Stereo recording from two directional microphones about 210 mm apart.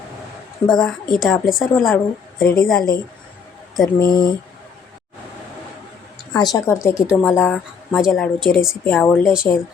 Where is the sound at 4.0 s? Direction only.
20° left (ahead or behind).